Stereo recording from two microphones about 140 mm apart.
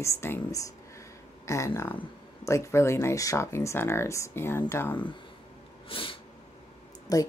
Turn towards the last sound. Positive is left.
turn(degrees=25)  # may be behind; listen again after turning